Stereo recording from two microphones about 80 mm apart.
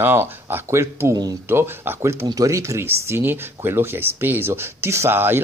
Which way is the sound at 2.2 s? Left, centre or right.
Right.